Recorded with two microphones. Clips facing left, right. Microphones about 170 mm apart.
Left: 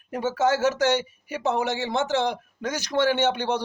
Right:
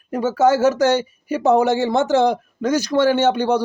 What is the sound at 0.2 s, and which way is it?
Speech, 40° right (ahead or behind).